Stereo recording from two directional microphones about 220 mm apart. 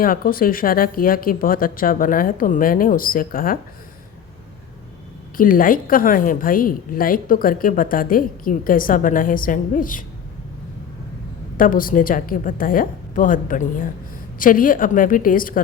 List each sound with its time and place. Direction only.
0.0 s a woman's voice: 40° left (ahead or behind)
5.4 s a woman's voice: 40° left (ahead or behind)
11.5 s a woman's voice: 40° left (ahead or behind)